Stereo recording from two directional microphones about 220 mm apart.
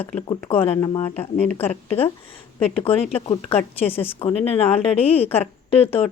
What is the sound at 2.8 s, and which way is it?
A woman's voice, 25° left (ahead or behind).